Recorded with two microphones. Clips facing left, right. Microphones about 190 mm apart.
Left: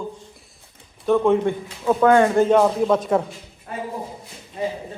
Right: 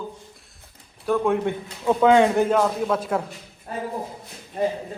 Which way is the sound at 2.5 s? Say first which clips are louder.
Left 5 dB; centre (ahead or behind).